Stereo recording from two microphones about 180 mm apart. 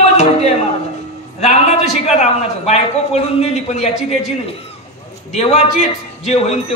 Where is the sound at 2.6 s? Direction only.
35° left (ahead or behind).